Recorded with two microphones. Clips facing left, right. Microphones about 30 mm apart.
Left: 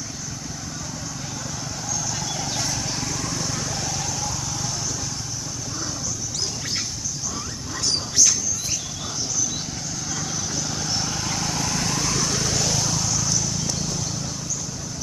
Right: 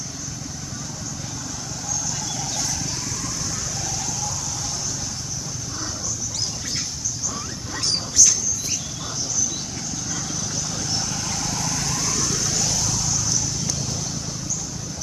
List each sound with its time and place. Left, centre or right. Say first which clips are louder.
8.2 s wild animals: right 1 dB; left
10.1 s vehicle: left 2 dB; centre; by 12.8 s left